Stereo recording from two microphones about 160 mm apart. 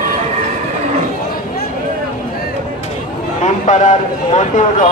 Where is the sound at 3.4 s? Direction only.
45° left (ahead or behind).